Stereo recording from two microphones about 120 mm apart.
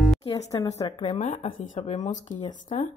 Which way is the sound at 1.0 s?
70° left (ahead or behind).